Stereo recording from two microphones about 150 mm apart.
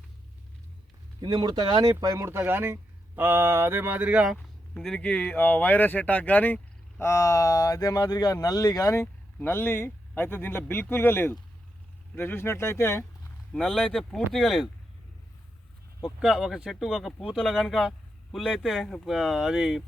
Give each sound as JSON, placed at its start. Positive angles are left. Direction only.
{"t": 1.2, "sound": "speech", "side_deg": -25}
{"t": 4.4, "sound": "speech", "side_deg": 5}
{"t": 13.5, "sound": "speech", "side_deg": 5}
{"t": 16.0, "sound": "speech", "side_deg": -5}